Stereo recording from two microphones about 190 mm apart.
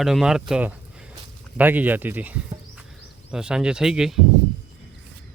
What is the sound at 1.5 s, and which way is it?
Speech, 10° right (ahead or behind).